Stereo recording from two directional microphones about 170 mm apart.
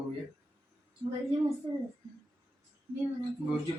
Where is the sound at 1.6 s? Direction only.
35° right (ahead or behind).